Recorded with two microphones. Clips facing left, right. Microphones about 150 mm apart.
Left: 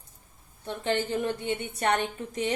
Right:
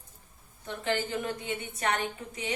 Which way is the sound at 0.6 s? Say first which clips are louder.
Left 3 dB; 30° left (ahead or behind).